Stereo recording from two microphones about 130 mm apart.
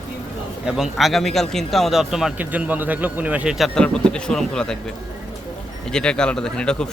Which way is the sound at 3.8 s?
5° left (ahead or behind).